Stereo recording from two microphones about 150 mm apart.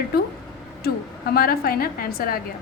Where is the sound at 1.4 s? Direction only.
80° left.